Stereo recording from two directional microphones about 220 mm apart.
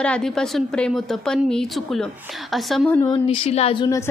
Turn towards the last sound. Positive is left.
turn(degrees=15)  # may be behind; listen again after turning